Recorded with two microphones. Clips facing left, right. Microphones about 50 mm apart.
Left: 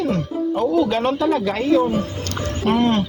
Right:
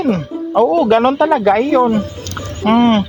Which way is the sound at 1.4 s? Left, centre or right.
Right.